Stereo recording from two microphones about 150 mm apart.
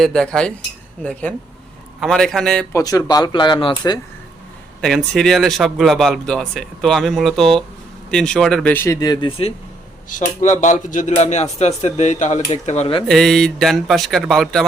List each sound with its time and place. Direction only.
0.0 s a man's voice: 5° left (ahead or behind)
2.0 s a man's voice: 5° left (ahead or behind)
2.7 s speech: 25° left (ahead or behind)
4.8 s a man's voice: 5° left (ahead or behind); by 9.3 s 25° left (ahead or behind)
10.1 s speech: 55° left (ahead or behind)
13.1 s a man's voice: 5° left (ahead or behind)